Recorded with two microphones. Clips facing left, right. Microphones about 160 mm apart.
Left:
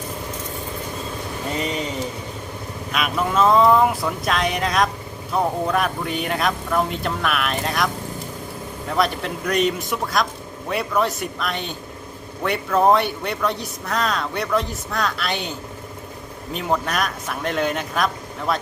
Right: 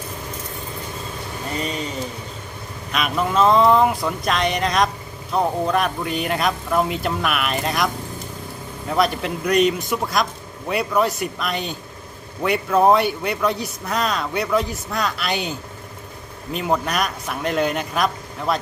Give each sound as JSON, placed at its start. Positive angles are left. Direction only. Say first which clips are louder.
{"t": 1.5, "sound": "speech", "louder": "left 1 dB", "side_deg": 20}
{"t": 2.9, "sound": "a man's voice", "louder": "right 1 dB", "side_deg": 0}
{"t": 8.9, "sound": "a man's voice", "louder": "right 2 dB", "side_deg": 0}